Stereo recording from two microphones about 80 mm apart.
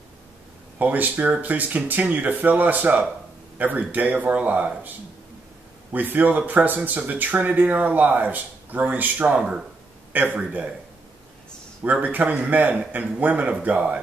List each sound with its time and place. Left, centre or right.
0.7 s speech: right
9.4 s speech: centre
10.1 s speech: right
11.8 s speech: centre